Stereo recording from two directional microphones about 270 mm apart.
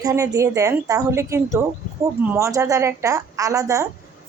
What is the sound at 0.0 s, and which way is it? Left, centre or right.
A woman's voice, centre.